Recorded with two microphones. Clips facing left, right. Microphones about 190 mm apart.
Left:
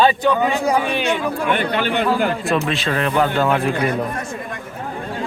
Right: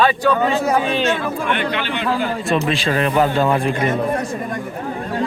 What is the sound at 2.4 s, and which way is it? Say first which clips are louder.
Speech: right 1 dB; centre (ahead or behind).